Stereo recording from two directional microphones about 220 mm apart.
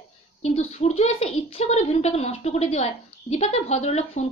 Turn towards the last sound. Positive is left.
turn(degrees=30)  # may be behind; listen again after turning